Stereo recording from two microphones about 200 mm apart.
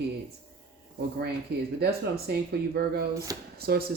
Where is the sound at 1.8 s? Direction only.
50° right (ahead or behind).